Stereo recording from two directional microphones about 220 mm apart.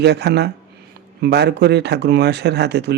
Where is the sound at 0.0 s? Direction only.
50° right (ahead or behind).